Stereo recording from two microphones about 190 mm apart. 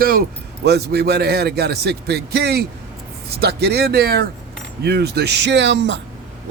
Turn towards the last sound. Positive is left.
turn(degrees=-70)  # may be behind; listen again after turning